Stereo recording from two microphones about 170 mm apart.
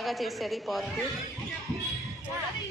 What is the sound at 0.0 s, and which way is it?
Speech, centre (ahead or behind).